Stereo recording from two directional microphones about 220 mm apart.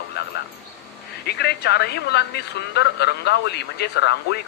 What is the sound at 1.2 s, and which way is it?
Speech, 45° left (ahead or behind).